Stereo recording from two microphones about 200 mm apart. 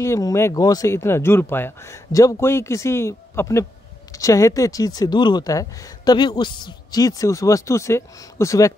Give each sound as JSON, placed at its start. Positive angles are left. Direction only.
{"t": 0.0, "sound": "speech", "side_deg": 15}